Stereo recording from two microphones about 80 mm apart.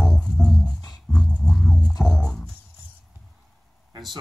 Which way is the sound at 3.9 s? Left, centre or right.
Right.